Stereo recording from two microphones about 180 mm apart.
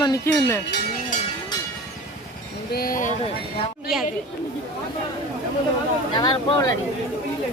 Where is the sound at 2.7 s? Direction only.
55° left (ahead or behind).